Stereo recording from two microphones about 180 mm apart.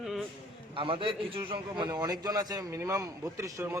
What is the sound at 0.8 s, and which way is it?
A man's voice, 30° right (ahead or behind).